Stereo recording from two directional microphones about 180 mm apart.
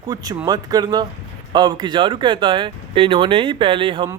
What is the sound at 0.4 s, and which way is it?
Speech, 20° right (ahead or behind).